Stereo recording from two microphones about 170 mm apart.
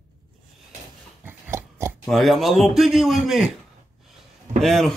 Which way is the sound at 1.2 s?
15° right (ahead or behind).